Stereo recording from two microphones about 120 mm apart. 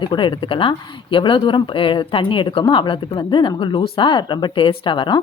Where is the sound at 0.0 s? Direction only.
40° left (ahead or behind).